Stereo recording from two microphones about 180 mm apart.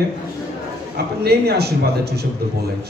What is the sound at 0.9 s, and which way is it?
A man's voice, 60° right (ahead or behind).